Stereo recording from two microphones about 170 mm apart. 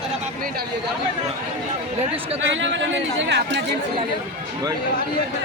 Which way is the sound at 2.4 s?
90° right.